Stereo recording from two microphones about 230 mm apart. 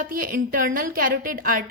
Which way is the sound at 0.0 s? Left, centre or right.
Right.